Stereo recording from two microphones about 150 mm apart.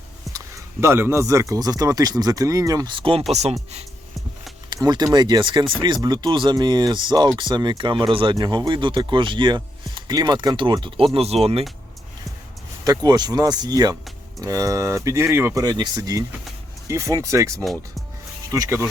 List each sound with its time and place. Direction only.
0.3 s speech: 15° right (ahead or behind); by 3.2 s 35° right (ahead or behind)
4.7 s speech: 30° right (ahead or behind)
12.8 s speech: 25° right (ahead or behind)
17.6 s speech: centre (ahead or behind)
18.5 s speech: 20° right (ahead or behind)